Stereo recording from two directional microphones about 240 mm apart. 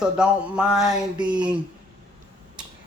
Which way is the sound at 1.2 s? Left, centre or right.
Centre.